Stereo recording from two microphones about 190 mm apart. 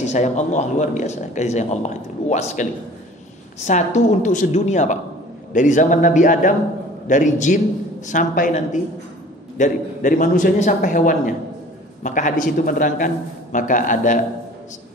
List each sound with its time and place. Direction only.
0.0 s a man's voice: 40° left (ahead or behind)